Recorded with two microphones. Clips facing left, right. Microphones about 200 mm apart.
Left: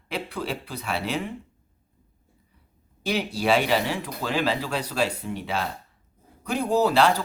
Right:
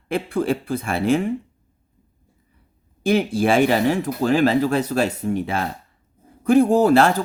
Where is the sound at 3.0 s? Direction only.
50° right (ahead or behind).